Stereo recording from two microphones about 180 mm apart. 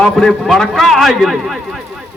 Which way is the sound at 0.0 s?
Centre (ahead or behind).